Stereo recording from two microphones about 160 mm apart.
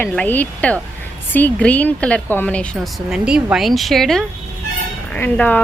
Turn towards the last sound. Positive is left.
turn(degrees=10)  # may be behind; listen again after turning